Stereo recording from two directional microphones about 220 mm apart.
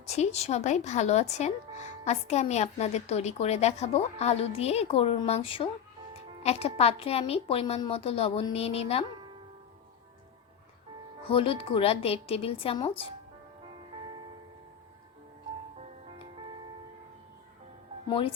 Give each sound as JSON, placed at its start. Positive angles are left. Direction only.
{"t": 0.1, "sound": "a woman's voice", "side_deg": 30}
{"t": 11.3, "sound": "a woman's voice", "side_deg": 25}